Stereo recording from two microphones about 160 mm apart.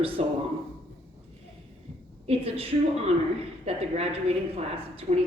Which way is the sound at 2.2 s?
40° right (ahead or behind).